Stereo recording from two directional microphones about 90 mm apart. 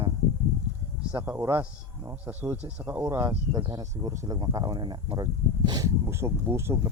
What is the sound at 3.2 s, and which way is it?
Speech, 40° right (ahead or behind).